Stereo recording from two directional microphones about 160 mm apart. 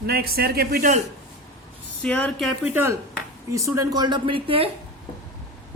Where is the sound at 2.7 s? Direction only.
15° right (ahead or behind); by 4.7 s 35° right (ahead or behind).